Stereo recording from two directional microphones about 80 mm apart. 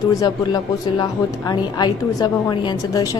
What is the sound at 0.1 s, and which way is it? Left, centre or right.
A woman's voice, left.